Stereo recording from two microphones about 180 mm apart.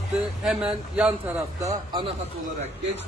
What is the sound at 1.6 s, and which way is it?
Speech, 25° right (ahead or behind).